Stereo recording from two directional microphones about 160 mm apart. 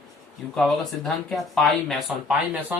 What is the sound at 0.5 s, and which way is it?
Speech, centre (ahead or behind).